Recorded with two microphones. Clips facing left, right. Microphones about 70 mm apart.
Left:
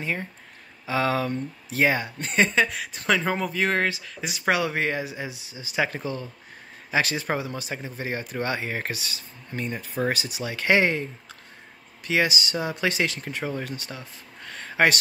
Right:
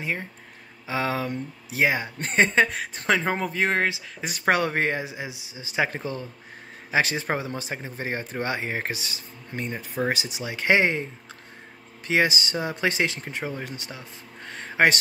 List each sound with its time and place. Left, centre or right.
0.0 s speech: centre
2.1 s speech: right
4.2 s speech: right
5.1 s speech: centre
12.1 s speech: right